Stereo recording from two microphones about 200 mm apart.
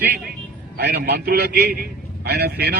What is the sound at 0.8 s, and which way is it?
A man's voice, 55° right (ahead or behind).